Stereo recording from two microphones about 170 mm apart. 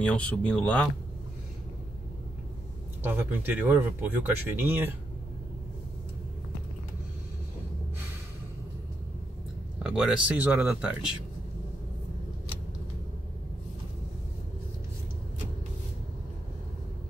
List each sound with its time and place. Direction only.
0.0 s speech: 5° left (ahead or behind)
3.0 s speech: 10° right (ahead or behind)
9.8 s speech: 5° right (ahead or behind)